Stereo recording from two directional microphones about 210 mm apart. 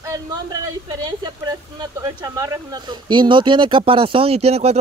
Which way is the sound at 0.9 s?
20° right (ahead or behind).